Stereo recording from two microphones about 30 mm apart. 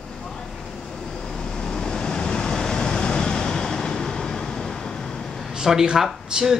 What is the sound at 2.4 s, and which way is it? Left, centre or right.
Vehicle, centre.